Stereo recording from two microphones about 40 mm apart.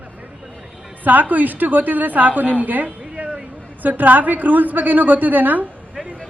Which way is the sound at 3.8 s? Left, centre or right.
Right.